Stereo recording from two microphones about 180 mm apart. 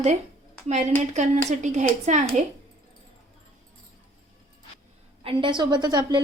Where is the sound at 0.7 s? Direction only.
40° right (ahead or behind).